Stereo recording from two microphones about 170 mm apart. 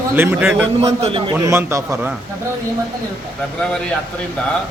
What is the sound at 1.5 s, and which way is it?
Speech, 15° right (ahead or behind).